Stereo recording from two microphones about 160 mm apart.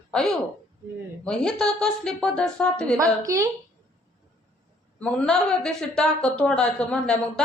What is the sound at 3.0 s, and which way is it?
Speech, 20° right (ahead or behind).